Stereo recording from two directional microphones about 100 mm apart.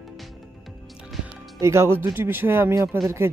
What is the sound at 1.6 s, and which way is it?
Speech, 25° right (ahead or behind).